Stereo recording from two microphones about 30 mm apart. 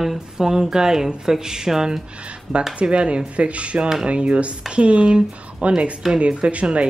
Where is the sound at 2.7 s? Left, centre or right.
Right.